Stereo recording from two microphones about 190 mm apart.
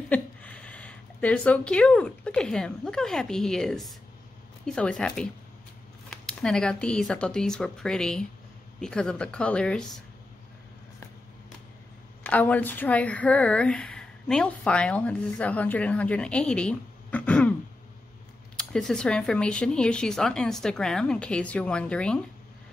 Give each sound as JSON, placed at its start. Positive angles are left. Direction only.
{"t": 0.1, "sound": "speech", "side_deg": 5}
{"t": 12.2, "sound": "speech", "side_deg": 5}
{"t": 18.6, "sound": "speech", "side_deg": 5}